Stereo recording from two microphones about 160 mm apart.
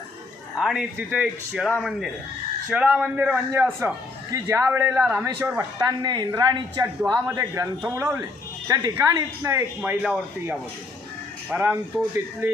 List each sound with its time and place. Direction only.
0.5 s a woman's voice: 5° right (ahead or behind)